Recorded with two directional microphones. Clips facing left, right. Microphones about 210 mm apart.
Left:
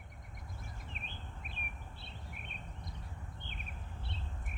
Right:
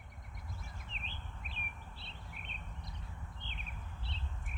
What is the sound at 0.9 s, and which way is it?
Bird vocalization, 50° left (ahead or behind).